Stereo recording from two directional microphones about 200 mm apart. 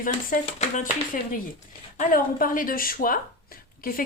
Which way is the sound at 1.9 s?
40° left (ahead or behind).